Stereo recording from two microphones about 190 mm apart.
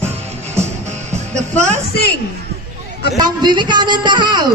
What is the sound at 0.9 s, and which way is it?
Music, 35° right (ahead or behind).